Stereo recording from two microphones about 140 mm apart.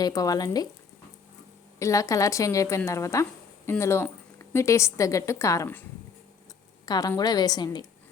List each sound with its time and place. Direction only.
0.0 s a woman's voice: 25° left (ahead or behind)
1.8 s a woman's voice: 20° left (ahead or behind)
6.8 s a woman's voice: 30° left (ahead or behind)